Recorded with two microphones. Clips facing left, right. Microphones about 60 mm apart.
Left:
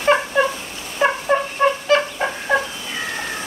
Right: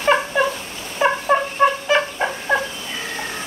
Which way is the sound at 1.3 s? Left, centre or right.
Centre.